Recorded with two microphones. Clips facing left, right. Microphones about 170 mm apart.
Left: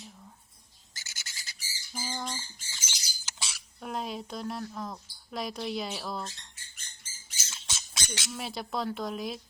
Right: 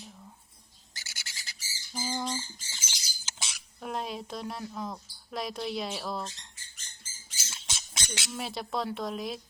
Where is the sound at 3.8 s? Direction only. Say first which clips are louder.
Even; centre (ahead or behind).